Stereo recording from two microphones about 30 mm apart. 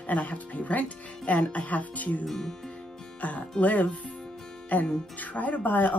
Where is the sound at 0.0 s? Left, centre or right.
Left.